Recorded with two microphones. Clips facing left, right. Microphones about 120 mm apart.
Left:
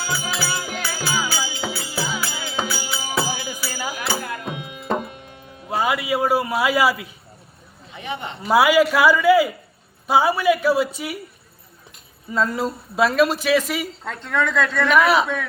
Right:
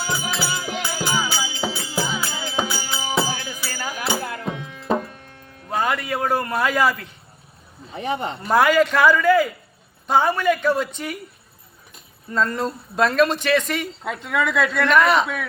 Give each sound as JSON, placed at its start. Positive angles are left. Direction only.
{"t": 0.0, "sound": "music", "side_deg": -20}
{"t": 2.0, "sound": "music", "side_deg": 5}
{"t": 2.5, "sound": "music", "side_deg": -20}
{"t": 3.2, "sound": "music", "side_deg": 5}
{"t": 7.9, "sound": "speech", "side_deg": -40}
{"t": 8.4, "sound": "a man's voice", "side_deg": 5}
{"t": 12.3, "sound": "speech", "side_deg": 5}
{"t": 14.0, "sound": "speech", "side_deg": -5}